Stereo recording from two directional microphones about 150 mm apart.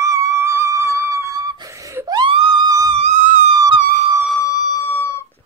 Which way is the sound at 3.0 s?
55° right (ahead or behind).